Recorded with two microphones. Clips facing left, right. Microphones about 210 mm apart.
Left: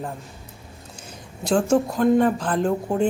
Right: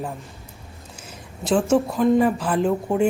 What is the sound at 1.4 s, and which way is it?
Speech, centre (ahead or behind).